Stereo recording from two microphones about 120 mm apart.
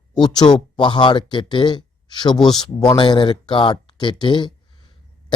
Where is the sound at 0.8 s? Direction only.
40° left (ahead or behind).